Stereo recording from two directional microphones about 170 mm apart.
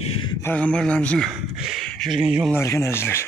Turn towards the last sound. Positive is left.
turn(degrees=15)  # may be behind; listen again after turning